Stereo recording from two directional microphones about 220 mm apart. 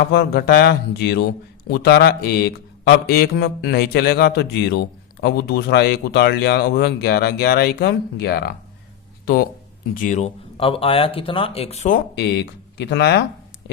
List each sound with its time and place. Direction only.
0.1 s speech: 45° left (ahead or behind)
12.1 s speech: 50° left (ahead or behind)